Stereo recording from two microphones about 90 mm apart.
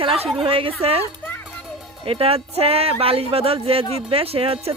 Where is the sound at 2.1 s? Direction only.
90° right.